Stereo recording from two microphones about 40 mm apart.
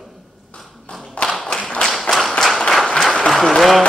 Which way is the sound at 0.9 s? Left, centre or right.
Left.